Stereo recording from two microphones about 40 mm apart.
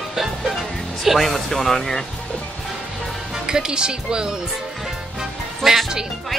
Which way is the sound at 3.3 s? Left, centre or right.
Centre.